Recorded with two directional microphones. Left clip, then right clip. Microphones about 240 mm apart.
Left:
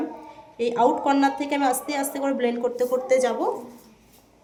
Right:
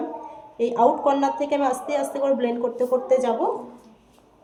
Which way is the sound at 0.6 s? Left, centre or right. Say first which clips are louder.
Right 2 dB; left.